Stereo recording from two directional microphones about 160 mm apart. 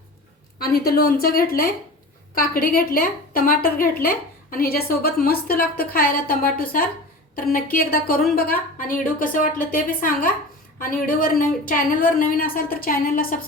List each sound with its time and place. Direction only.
0.6 s a woman's voice: 75° left (ahead or behind)